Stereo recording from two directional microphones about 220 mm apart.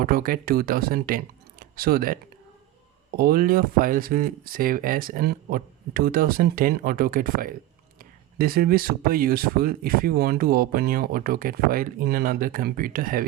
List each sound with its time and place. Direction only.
0.0 s speech: 40° right (ahead or behind)
3.2 s speech: 40° right (ahead or behind)